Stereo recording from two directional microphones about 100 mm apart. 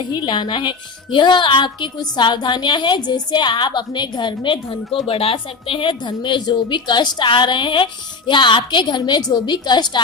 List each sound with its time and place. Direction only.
0.1 s a woman's voice: 50° left (ahead or behind)